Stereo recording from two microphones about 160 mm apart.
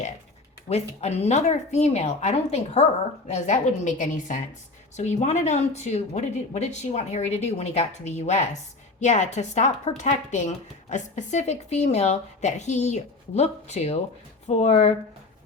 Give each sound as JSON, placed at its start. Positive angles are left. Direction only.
{"t": 0.7, "sound": "a woman's voice", "side_deg": 40}